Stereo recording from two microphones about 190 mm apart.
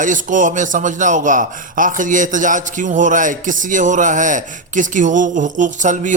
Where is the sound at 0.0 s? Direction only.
45° right (ahead or behind).